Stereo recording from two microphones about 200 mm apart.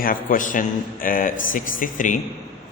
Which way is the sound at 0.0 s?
45° left (ahead or behind).